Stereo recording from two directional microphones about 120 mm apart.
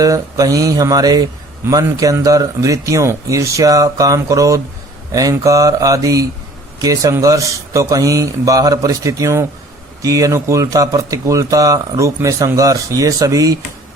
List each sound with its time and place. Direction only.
0.0 s a man's voice: 30° right (ahead or behind)